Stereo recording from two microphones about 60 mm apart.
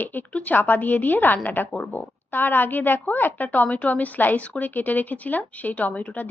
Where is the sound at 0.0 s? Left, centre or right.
Left.